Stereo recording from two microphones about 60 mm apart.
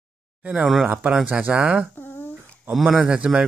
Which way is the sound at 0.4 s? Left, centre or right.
Right.